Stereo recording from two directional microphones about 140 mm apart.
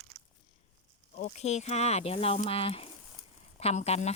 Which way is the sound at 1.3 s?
55° left (ahead or behind).